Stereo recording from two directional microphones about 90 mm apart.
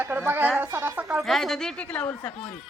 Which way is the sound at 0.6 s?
20° right (ahead or behind).